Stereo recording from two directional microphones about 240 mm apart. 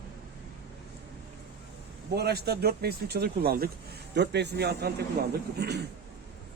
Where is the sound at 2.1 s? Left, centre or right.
Right.